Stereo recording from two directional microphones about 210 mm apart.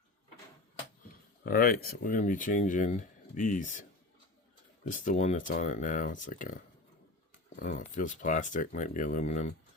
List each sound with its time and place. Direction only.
1.5 s speech: 45° left (ahead or behind)
4.9 s speech: 40° left (ahead or behind)
7.6 s speech: 35° left (ahead or behind)